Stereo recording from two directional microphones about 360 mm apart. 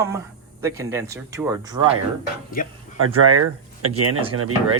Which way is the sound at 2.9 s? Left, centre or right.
Right.